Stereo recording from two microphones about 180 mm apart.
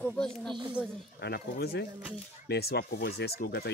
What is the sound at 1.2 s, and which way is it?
Speech, 65° left (ahead or behind).